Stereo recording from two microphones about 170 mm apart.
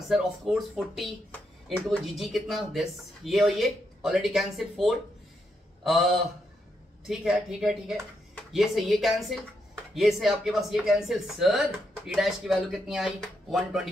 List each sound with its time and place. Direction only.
0.1 s speech: centre (ahead or behind)